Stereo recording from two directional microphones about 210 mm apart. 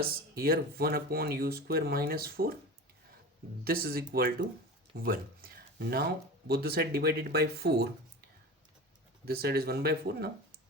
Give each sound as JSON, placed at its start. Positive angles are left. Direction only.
{"t": 0.0, "sound": "speech", "side_deg": -45}
{"t": 3.6, "sound": "speech", "side_deg": -45}
{"t": 9.2, "sound": "speech", "side_deg": -45}